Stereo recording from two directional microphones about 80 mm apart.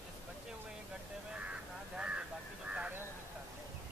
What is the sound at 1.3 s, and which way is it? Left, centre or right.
Speech, centre.